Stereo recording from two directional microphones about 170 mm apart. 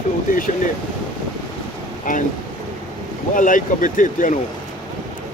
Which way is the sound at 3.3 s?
50° left (ahead or behind).